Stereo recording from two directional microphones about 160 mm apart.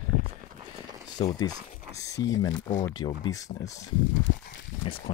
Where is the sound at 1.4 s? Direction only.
20° left (ahead or behind).